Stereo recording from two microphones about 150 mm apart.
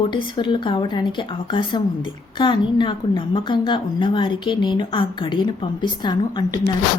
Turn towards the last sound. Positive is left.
turn(degrees=25)  # may be behind; listen again after turning